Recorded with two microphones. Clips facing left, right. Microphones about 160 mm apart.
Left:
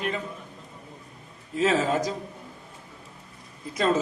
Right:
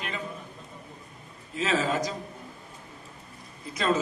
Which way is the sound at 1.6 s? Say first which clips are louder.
Left 4 dB; 50° left (ahead or behind).